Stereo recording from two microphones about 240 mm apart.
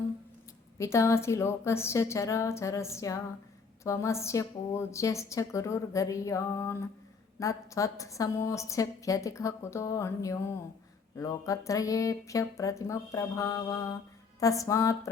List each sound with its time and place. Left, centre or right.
0.8 s a woman's voice: centre